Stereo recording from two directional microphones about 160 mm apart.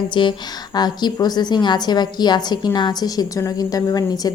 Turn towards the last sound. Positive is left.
turn(degrees=25)  # may be behind; listen again after turning